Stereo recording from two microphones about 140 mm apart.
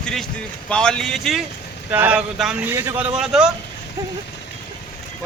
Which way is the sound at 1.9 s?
15° right (ahead or behind).